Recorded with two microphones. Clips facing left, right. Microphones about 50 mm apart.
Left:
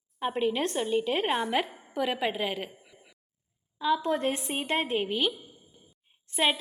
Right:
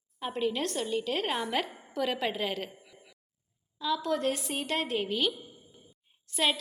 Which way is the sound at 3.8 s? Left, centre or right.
Left.